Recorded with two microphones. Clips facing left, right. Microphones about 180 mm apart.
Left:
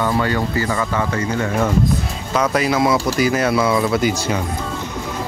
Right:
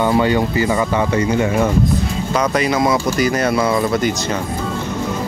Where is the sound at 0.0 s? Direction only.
20° right (ahead or behind).